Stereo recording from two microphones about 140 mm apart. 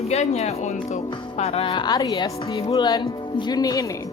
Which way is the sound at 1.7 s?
30° left (ahead or behind).